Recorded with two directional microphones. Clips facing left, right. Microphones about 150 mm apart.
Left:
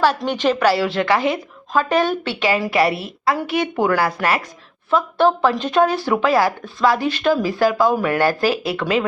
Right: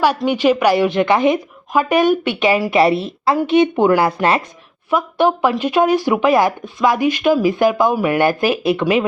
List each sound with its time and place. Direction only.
0.2 s a woman's voice: 10° right (ahead or behind)